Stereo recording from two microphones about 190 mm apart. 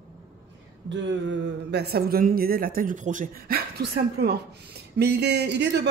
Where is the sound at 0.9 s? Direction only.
70° right (ahead or behind).